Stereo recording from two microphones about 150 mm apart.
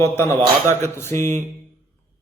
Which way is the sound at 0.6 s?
20° left (ahead or behind).